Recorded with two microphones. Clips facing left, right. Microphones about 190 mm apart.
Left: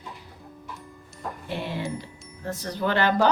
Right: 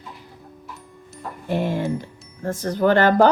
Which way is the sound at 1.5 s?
45° right (ahead or behind).